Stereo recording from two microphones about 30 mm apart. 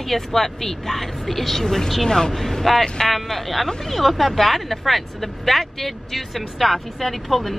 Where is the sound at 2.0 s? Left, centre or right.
Left.